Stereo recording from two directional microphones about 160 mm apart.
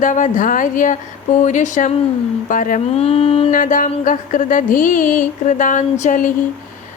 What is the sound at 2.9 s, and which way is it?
Mantra, 40° left (ahead or behind).